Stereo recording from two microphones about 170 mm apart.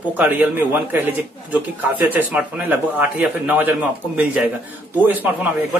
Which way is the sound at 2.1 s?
10° right (ahead or behind).